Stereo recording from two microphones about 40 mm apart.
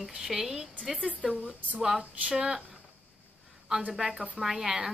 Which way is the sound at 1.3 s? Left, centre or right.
Right.